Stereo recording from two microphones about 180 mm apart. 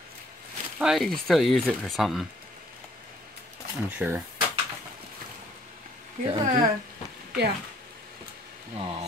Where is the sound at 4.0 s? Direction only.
10° right (ahead or behind).